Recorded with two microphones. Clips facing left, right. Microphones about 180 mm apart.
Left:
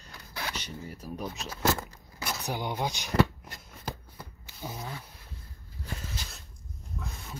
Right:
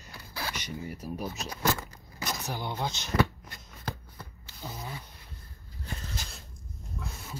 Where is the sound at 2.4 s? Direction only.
15° left (ahead or behind).